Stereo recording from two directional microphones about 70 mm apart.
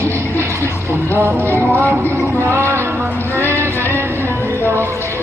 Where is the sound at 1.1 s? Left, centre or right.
Right.